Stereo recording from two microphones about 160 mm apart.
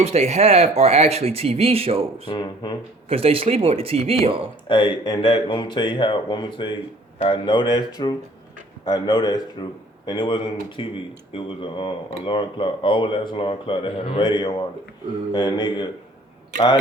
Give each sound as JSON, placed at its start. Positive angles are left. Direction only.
{"t": 0.0, "sound": "speech", "side_deg": -40}
{"t": 2.3, "sound": "speech", "side_deg": 30}
{"t": 3.1, "sound": "speech", "side_deg": -35}
{"t": 4.7, "sound": "speech", "side_deg": 30}